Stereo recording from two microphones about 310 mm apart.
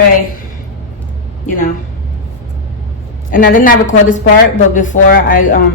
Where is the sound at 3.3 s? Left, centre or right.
Left.